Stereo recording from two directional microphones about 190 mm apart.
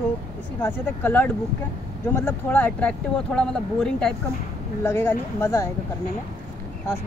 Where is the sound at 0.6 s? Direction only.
10° left (ahead or behind).